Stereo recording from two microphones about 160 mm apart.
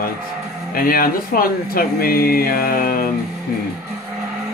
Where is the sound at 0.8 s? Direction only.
65° left (ahead or behind).